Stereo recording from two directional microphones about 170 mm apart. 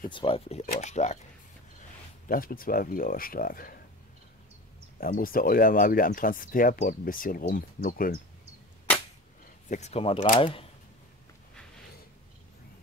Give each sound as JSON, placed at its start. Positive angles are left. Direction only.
{"t": 0.1, "sound": "speech", "side_deg": 30}
{"t": 0.6, "sound": "speech", "side_deg": 50}
{"t": 2.2, "sound": "speech", "side_deg": 60}
{"t": 5.0, "sound": "speech", "side_deg": 55}
{"t": 9.7, "sound": "speech", "side_deg": 40}